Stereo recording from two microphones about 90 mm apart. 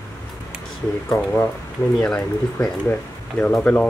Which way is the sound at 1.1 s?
35° left (ahead or behind).